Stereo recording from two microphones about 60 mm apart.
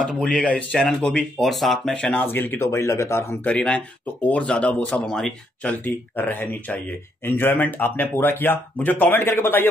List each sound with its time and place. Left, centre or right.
0.0 s speech: centre
0.4 s speech: left
0.7 s speech: centre
2.1 s speech: left
2.7 s speech: left
3.4 s speech: centre
5.0 s speech: centre
6.1 s speech: left